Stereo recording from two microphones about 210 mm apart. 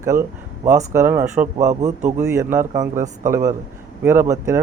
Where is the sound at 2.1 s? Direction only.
15° right (ahead or behind).